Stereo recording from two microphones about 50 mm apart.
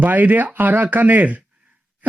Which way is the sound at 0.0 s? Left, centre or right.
Right.